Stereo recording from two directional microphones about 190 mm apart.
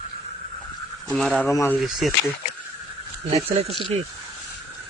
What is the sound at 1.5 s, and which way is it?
Speech, 15° left (ahead or behind).